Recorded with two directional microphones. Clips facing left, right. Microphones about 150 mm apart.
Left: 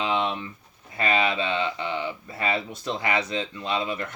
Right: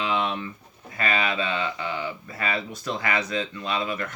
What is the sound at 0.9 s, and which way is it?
Speech, 25° left (ahead or behind).